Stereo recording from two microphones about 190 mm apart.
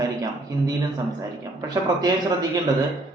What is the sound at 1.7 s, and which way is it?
Speech, 20° right (ahead or behind).